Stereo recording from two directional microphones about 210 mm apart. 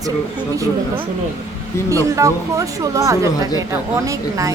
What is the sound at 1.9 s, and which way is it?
Speech, 15° right (ahead or behind).